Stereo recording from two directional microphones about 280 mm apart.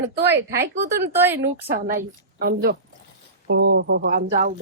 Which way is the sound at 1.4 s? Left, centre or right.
Right.